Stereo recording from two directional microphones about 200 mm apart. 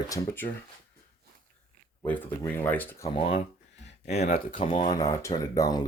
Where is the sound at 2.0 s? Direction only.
10° left (ahead or behind).